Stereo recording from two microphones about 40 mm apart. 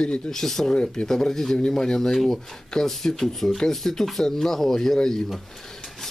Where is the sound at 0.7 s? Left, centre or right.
Left.